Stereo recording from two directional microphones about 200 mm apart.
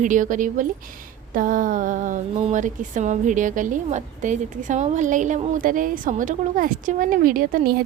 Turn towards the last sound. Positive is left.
turn(degrees=-45)  # may be behind; listen again after turning